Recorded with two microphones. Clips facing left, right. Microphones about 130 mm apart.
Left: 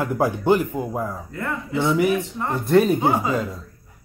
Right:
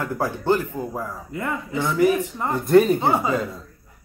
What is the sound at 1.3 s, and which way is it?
Speech, 15° right (ahead or behind).